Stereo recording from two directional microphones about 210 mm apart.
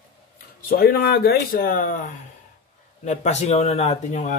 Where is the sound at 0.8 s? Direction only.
45° left (ahead or behind).